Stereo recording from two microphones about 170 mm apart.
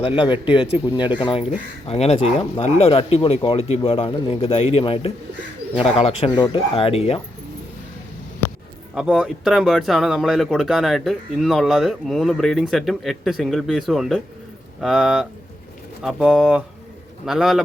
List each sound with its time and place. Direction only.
0.2 s speech: 30° left (ahead or behind)
9.0 s speech: 5° right (ahead or behind)